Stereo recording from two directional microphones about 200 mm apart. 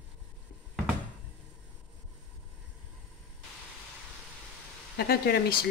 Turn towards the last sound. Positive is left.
turn(degrees=50)  # may be behind; listen again after turning